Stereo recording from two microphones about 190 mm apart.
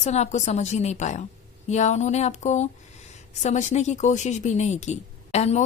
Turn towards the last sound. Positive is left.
turn(degrees=35)  # may be behind; listen again after turning